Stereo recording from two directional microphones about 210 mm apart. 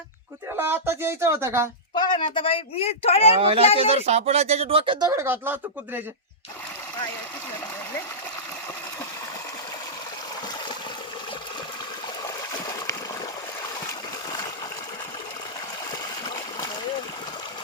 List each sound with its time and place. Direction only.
0.5 s speech: 10° right (ahead or behind)
2.0 s speech: 25° left (ahead or behind)
3.3 s speech: 30° right (ahead or behind); by 6.0 s 10° right (ahead or behind)
16.2 s splash: 20° left (ahead or behind)